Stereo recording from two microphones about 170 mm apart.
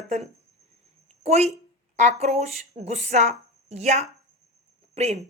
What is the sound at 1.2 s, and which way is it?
A woman's voice, 40° right (ahead or behind).